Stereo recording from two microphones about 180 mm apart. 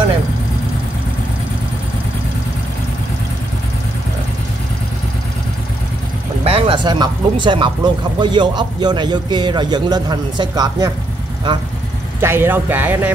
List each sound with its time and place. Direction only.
6.4 s speech: 35° right (ahead or behind)
12.2 s speech: 15° right (ahead or behind)